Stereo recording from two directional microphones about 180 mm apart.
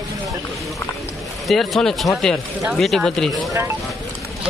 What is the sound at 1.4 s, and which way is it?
Speech, centre (ahead or behind).